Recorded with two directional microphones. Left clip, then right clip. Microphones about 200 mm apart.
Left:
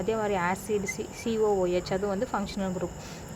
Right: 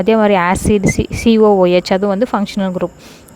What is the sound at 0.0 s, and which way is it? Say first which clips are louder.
Speech: right 16 dB; 45° right (ahead or behind).